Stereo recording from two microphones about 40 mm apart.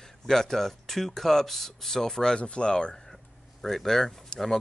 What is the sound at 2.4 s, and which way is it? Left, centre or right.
Speech, left.